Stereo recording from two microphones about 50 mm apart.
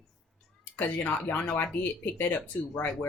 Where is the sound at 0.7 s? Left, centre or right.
Left.